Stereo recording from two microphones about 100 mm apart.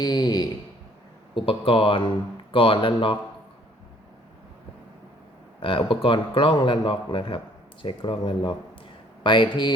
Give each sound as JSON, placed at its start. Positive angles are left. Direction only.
{"t": 0.0, "sound": "speech", "side_deg": 40}
{"t": 1.4, "sound": "speech", "side_deg": 65}
{"t": 5.5, "sound": "speech", "side_deg": 60}